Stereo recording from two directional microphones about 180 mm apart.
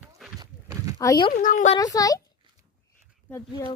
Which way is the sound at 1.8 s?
20° left (ahead or behind).